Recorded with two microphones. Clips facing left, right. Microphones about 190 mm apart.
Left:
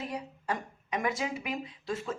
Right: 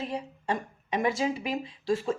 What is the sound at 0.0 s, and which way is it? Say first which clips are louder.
A woman's voice: right 3 dB; 25° right (ahead or behind).